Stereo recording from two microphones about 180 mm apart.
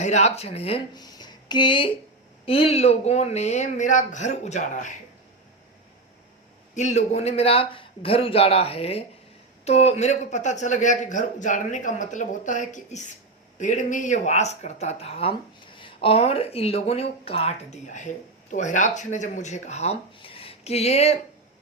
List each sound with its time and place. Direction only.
0.0 s speech: 40° left (ahead or behind)
0.9 s a sound: 25° left (ahead or behind)
2.5 s speech: 35° left (ahead or behind)
6.7 s a man's voice: 40° left (ahead or behind)